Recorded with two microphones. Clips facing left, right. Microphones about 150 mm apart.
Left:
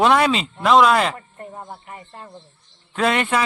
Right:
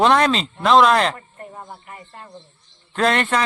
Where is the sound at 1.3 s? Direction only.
20° left (ahead or behind).